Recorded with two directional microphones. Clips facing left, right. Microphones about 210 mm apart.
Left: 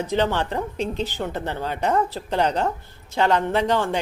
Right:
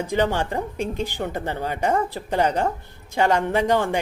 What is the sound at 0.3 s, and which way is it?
Speech, 10° right (ahead or behind).